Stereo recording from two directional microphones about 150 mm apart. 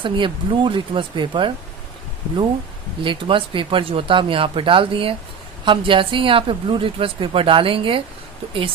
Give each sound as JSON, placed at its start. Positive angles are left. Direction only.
{"t": 0.0, "sound": "speech", "side_deg": -35}
{"t": 3.0, "sound": "speech", "side_deg": -35}